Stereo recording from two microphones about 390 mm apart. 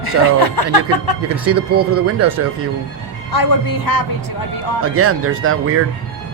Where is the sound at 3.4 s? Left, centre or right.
Left.